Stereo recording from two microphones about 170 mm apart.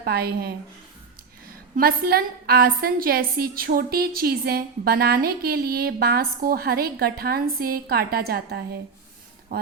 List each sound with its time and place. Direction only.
0.0 s a woman's voice: 65° right (ahead or behind)